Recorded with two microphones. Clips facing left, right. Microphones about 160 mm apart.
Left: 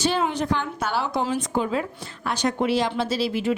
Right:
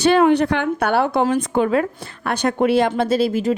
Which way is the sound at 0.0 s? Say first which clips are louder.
Right 9 dB; 65° right (ahead or behind).